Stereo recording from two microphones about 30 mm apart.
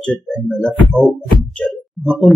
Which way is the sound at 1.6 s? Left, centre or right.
Left.